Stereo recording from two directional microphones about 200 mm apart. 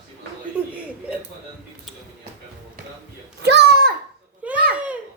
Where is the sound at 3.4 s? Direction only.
55° right (ahead or behind).